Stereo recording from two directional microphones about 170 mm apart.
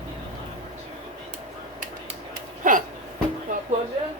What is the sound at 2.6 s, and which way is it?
Hiccup, 50° right (ahead or behind).